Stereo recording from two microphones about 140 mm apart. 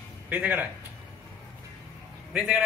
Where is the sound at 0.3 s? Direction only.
10° right (ahead or behind).